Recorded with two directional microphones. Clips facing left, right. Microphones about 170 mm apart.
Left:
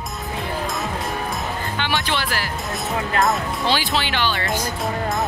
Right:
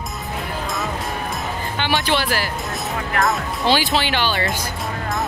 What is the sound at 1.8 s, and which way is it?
Speech, 30° right (ahead or behind).